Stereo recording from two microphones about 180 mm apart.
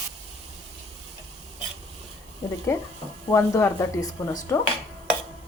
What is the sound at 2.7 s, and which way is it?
A woman's voice, 15° left (ahead or behind).